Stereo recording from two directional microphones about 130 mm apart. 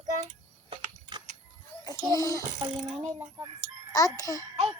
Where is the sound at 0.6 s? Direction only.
35° right (ahead or behind).